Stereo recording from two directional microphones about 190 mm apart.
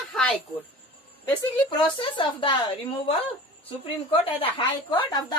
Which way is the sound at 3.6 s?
30° left (ahead or behind).